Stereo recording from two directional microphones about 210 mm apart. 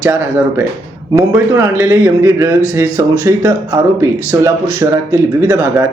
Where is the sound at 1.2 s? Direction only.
15° right (ahead or behind).